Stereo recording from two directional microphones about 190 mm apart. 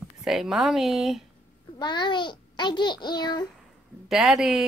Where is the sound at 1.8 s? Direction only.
25° left (ahead or behind).